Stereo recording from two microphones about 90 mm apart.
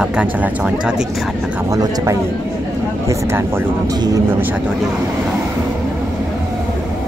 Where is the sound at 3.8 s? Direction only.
45° right (ahead or behind).